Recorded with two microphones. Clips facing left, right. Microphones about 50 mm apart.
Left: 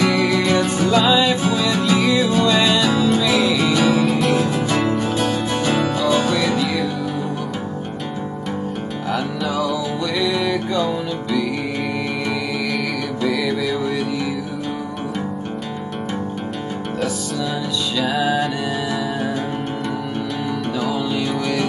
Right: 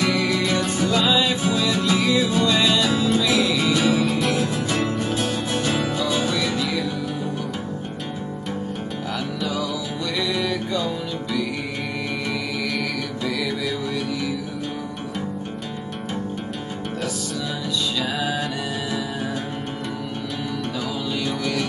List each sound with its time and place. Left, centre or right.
0.4 s music: centre
3.3 s music: centre
3.6 s music: centre
4.4 s music: centre
6.0 s music: centre
10.1 s music: centre
10.4 s music: centre
13.2 s music: centre
17.9 s music: centre
21.1 s music: centre